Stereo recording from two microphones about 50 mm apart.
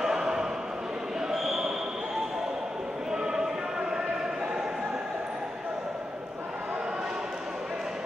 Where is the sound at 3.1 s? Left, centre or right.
Centre.